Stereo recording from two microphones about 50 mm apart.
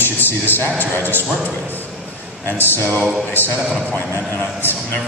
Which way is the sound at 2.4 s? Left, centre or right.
Left.